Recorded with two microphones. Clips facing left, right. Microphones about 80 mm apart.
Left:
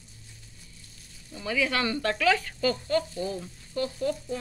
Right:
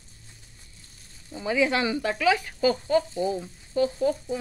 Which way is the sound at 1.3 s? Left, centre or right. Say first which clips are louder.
Right 4 dB; right.